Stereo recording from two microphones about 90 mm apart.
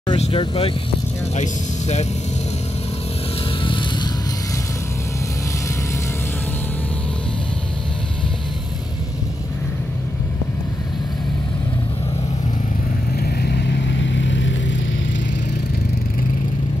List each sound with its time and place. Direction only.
0.1 s speech: 70° left (ahead or behind)
3.6 s vehicle: 65° left (ahead or behind)